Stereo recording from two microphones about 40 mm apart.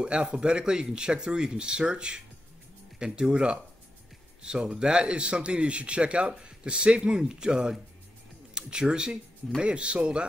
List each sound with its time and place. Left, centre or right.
0.0 s a man's voice: right